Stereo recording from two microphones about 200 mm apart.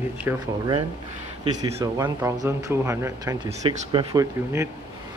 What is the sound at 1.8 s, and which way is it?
Speech, 15° right (ahead or behind).